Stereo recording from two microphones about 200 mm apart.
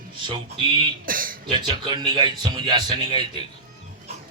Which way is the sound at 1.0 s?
45° right (ahead or behind).